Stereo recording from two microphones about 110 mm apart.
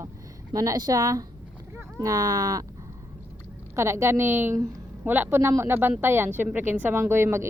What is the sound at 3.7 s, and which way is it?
Speech, 25° right (ahead or behind).